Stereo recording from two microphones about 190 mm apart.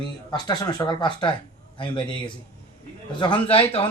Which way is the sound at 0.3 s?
20° left (ahead or behind).